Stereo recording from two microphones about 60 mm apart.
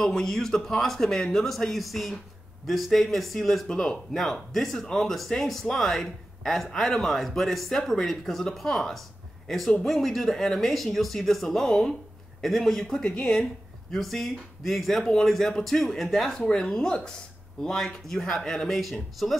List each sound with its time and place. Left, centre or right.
0.0 s speech: centre
13.0 s speech: centre